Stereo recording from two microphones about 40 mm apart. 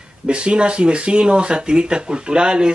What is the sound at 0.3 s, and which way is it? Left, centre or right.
Speech, right.